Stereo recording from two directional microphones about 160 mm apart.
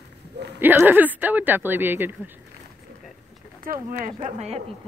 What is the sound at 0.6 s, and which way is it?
Speech, 10° right (ahead or behind).